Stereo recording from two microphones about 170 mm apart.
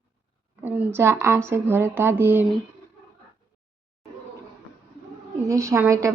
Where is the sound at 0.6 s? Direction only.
10° right (ahead or behind).